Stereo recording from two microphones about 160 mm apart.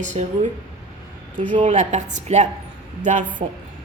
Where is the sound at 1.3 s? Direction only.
55° right (ahead or behind).